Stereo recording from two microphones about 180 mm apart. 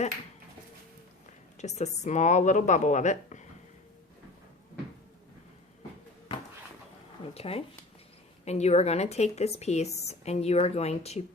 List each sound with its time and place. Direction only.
1.5 s a woman's voice: 40° left (ahead or behind)
7.3 s a woman's voice: 35° left (ahead or behind)